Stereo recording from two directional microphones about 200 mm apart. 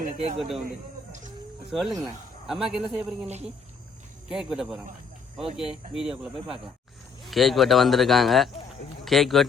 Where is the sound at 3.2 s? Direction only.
35° right (ahead or behind).